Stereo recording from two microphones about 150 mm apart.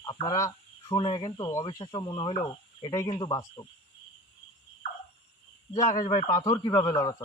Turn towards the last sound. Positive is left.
turn(degrees=25)  # may be behind; listen again after turning